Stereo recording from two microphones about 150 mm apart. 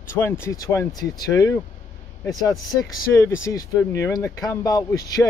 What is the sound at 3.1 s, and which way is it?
Speech, 20° left (ahead or behind).